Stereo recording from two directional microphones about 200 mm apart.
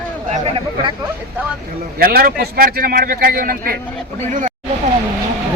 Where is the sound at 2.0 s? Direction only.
45° right (ahead or behind).